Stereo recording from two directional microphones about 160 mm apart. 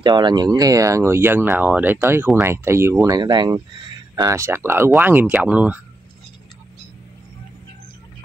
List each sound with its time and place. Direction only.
0.0 s speech: 30° right (ahead or behind); by 5.8 s 10° right (ahead or behind)